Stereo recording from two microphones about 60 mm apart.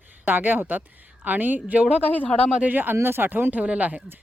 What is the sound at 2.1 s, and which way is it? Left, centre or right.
Speech, left.